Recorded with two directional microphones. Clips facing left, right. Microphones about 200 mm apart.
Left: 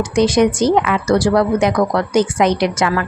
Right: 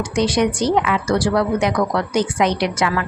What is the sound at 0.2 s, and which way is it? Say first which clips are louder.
Speech: left 5 dB; 45° left (ahead or behind).